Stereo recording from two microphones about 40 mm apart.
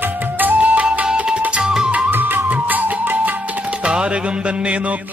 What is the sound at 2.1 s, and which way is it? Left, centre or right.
Music, right.